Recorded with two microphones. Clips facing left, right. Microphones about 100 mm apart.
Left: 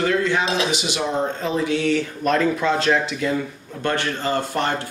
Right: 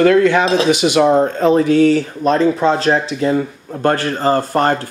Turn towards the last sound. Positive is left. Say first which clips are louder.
# right 8 dB
turn(degrees=-45)  # may be behind; listen again after turning